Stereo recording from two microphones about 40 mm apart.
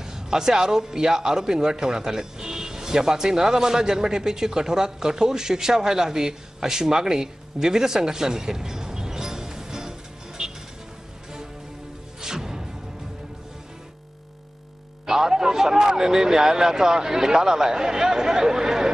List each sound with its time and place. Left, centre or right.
0.0 s a man's voice: centre
12.2 s music: centre
15.0 s a man's voice: centre